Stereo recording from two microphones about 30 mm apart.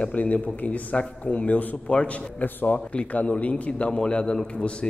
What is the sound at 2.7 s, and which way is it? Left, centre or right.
Speech, left.